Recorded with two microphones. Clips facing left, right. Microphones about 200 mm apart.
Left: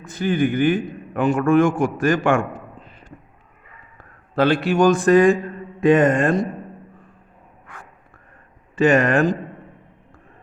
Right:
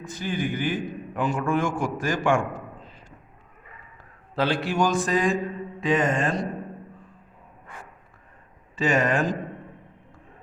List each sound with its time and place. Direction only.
0.0 s a man's voice: 60° left (ahead or behind)
4.4 s a man's voice: 60° left (ahead or behind)
8.7 s speech: 60° left (ahead or behind)